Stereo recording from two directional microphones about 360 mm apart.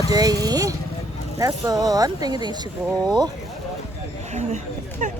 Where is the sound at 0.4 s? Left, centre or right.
Centre.